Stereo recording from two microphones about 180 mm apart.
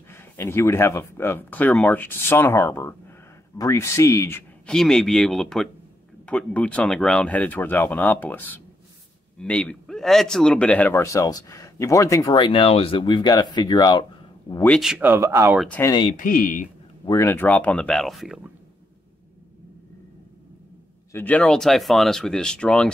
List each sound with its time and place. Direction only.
0.1 s speech: 15° left (ahead or behind)
4.6 s speech: 5° left (ahead or behind); by 14.0 s 25° left (ahead or behind)
14.7 s speech: centre (ahead or behind)
15.8 s speech: 25° left (ahead or behind)
16.1 s speech: 50° left (ahead or behind)
17.0 s speech: 15° left (ahead or behind); by 18.5 s centre (ahead or behind)
21.1 s speech: 10° left (ahead or behind)